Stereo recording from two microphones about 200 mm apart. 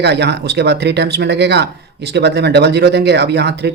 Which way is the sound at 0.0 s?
60° right (ahead or behind).